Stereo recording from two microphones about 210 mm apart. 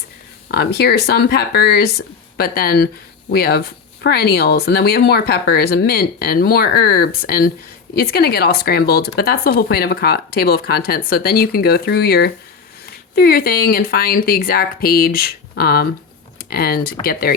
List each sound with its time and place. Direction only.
0.4 s speech: 50° left (ahead or behind)